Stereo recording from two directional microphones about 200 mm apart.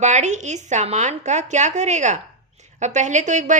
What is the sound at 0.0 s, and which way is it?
Speech, 35° right (ahead or behind).